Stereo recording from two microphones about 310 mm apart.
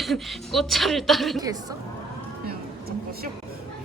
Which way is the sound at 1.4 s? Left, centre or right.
Centre.